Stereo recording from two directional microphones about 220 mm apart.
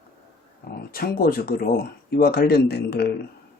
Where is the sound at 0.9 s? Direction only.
40° left (ahead or behind).